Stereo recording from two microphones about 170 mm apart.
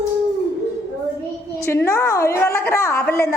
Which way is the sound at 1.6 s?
15° left (ahead or behind).